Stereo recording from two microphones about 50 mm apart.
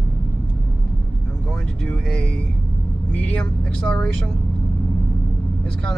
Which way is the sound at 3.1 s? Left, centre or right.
Left.